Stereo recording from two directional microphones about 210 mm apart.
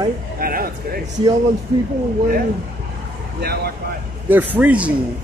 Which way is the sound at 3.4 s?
50° right (ahead or behind).